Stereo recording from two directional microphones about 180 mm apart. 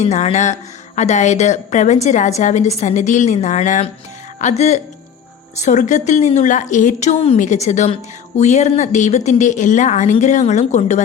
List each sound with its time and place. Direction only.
0.0 s speech: 40° left (ahead or behind)